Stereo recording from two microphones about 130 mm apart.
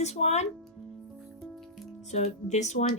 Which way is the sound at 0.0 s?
55° left (ahead or behind).